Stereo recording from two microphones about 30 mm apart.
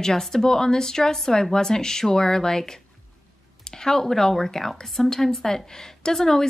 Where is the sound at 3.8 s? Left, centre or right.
Centre.